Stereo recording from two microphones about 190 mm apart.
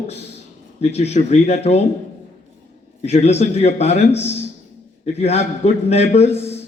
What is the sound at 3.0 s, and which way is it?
A man's voice, 35° left (ahead or behind).